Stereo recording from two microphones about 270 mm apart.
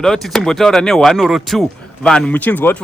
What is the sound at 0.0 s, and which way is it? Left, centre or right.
Speech, centre.